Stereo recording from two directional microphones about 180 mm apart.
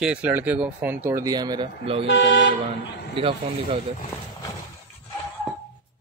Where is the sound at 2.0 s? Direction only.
90° left.